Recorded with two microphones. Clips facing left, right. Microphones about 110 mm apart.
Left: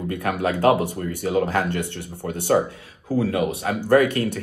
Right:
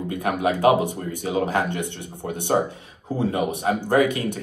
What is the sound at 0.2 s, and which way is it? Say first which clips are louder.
Speech: right 1 dB; 20° right (ahead or behind).